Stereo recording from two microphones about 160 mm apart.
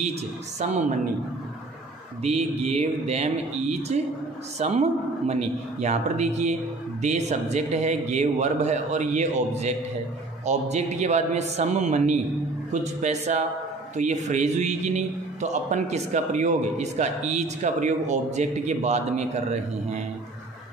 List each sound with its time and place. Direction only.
0.6 s a man's voice: 45° right (ahead or behind)
2.2 s a man's voice: 40° right (ahead or behind)